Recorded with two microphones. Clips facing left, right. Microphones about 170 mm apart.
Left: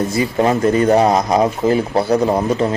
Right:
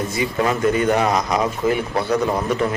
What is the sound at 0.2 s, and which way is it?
Speech, 30° left (ahead or behind).